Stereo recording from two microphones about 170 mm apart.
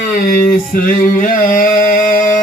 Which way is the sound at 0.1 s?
55° left (ahead or behind).